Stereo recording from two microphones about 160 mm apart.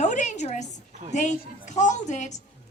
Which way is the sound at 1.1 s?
50° left (ahead or behind).